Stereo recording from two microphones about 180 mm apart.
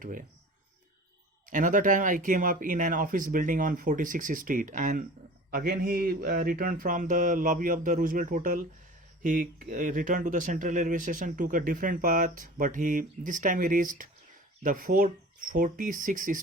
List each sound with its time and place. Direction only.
0.0 s speech: 50° right (ahead or behind)
1.5 s speech: 45° right (ahead or behind)